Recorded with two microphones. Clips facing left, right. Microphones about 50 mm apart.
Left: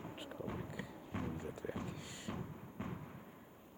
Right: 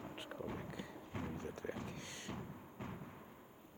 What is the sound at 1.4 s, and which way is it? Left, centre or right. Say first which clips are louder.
Timpani: left 1 dB; centre.